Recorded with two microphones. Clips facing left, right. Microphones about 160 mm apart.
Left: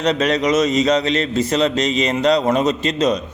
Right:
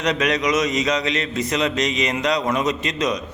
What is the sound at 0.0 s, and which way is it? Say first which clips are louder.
A man's voice: left 3 dB; 30° left (ahead or behind).